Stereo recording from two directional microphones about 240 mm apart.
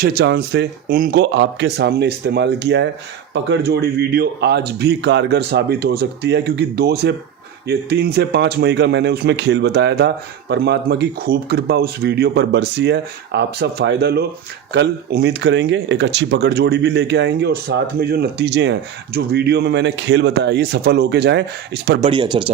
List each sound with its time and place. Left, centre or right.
0.0 s speech: right
22.0 s speech: centre